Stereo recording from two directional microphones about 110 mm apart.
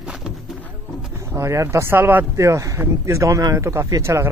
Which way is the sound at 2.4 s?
30° right (ahead or behind).